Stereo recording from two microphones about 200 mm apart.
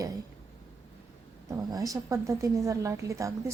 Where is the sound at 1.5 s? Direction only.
15° right (ahead or behind).